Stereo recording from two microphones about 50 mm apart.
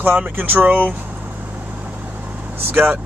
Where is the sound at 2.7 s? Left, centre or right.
Right.